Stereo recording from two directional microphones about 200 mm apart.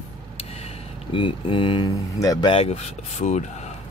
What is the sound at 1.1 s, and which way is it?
Speech, 25° left (ahead or behind).